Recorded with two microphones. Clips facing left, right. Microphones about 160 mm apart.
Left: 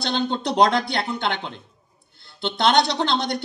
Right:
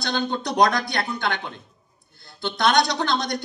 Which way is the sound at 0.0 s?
25° left (ahead or behind).